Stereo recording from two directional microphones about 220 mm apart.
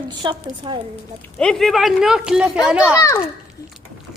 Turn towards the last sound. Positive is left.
turn(degrees=15)  # may be behind; listen again after turning